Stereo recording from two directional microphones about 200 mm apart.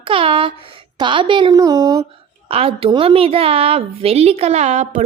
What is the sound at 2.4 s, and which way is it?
A woman's voice, 30° right (ahead or behind).